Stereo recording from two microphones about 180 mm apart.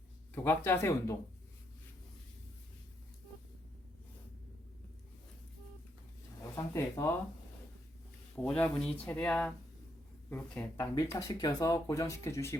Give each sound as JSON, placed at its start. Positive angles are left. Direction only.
{"t": 0.4, "sound": "speech", "side_deg": 10}
{"t": 6.4, "sound": "speech", "side_deg": 15}
{"t": 8.4, "sound": "speech", "side_deg": 5}